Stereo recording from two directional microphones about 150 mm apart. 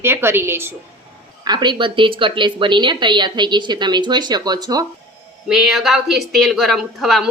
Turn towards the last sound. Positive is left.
turn(degrees=0)  # may be behind; listen again after turning